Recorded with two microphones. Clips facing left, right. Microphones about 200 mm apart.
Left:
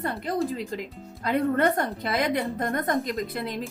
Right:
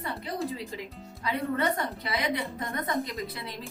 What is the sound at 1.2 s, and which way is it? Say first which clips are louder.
A woman's voice: left 6 dB; 55° left (ahead or behind).